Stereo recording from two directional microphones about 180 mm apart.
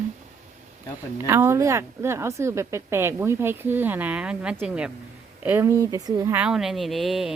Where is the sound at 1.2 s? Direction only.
15° right (ahead or behind).